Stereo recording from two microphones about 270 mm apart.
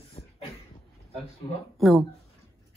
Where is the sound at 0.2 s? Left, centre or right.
Left.